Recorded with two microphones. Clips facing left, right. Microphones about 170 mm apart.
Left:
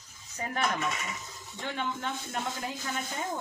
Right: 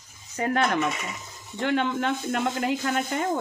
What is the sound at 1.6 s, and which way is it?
Speech, 85° right.